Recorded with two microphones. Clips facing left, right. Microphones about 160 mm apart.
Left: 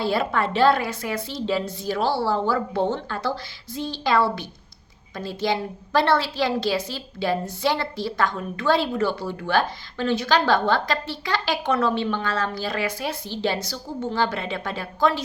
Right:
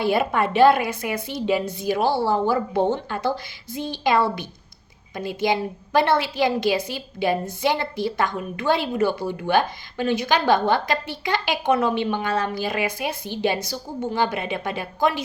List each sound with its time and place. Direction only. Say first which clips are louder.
0.0 s a woman's voice: right 2 dB; 15° right (ahead or behind)